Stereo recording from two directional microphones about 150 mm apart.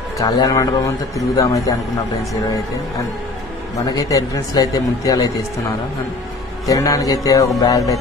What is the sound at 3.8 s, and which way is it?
Speech, 25° left (ahead or behind).